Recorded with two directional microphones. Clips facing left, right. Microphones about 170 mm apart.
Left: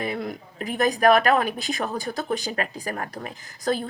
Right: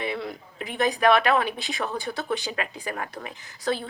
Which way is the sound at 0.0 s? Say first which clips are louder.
Left 2 dB; 45° left (ahead or behind).